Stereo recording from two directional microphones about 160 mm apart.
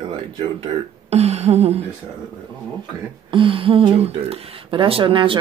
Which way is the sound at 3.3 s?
35° right (ahead or behind).